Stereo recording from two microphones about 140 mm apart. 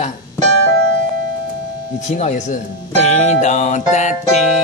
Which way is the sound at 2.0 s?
55° left (ahead or behind).